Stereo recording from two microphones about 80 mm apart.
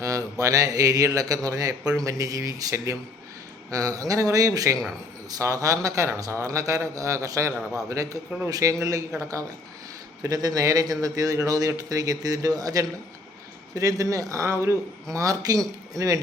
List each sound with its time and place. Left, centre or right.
0.0 s speech: right